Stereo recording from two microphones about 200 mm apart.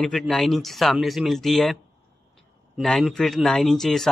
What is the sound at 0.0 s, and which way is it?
A man's voice, 5° left (ahead or behind).